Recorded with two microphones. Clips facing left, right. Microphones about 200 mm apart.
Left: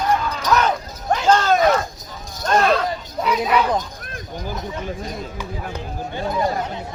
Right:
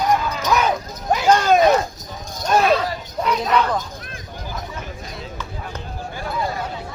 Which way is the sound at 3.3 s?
10° left (ahead or behind).